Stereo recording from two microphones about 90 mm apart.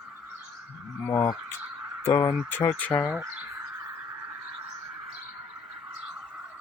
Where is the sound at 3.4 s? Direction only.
30° right (ahead or behind).